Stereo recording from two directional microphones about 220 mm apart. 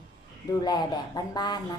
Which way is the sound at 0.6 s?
20° left (ahead or behind).